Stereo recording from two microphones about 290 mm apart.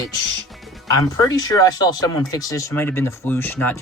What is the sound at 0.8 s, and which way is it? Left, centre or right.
Speech, centre.